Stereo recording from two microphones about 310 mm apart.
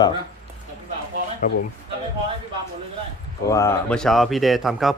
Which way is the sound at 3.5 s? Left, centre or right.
Centre.